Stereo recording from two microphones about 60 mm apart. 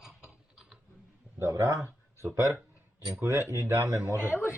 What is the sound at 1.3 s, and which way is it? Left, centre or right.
Speech, right.